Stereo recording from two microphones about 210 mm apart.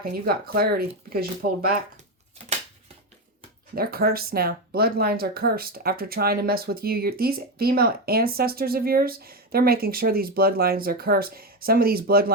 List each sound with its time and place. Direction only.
0.0 s speech: 45° right (ahead or behind)
3.8 s speech: 45° right (ahead or behind)